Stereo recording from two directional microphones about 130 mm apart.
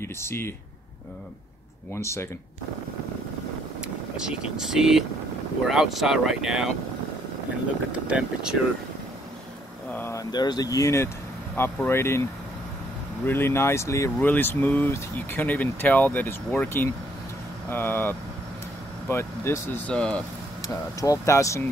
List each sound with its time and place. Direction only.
0.0 s speech: 20° left (ahead or behind)
2.0 s speech: 20° left (ahead or behind)
3.8 s speech: 5° right (ahead or behind)
7.9 s speech: 10° right (ahead or behind)
9.9 s a sound: 20° left (ahead or behind)
10.3 s speech: 30° left (ahead or behind)
13.2 s speech: 15° left (ahead or behind)
19.9 s speech: 5° left (ahead or behind)
20.6 s speech: 25° left (ahead or behind)